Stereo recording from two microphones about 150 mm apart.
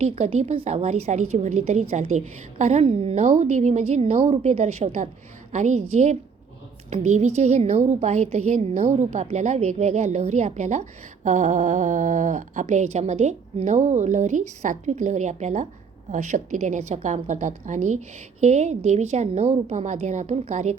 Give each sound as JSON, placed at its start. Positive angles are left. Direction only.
{"t": 0.0, "sound": "a woman's voice", "side_deg": -45}